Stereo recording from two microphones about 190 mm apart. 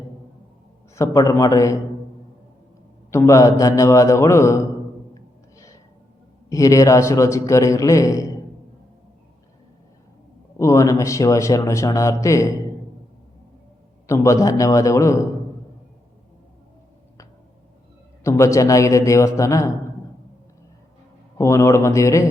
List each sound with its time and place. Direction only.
0.9 s a man's voice: 15° left (ahead or behind)
3.1 s a man's voice: 15° left (ahead or behind)
6.5 s a man's voice: 15° left (ahead or behind)
10.6 s a man's voice: 15° left (ahead or behind)
14.1 s a man's voice: 15° left (ahead or behind)
18.2 s a man's voice: 15° left (ahead or behind)
21.3 s a man's voice: 15° left (ahead or behind)